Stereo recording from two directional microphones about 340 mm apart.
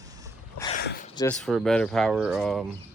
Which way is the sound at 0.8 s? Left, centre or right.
Left.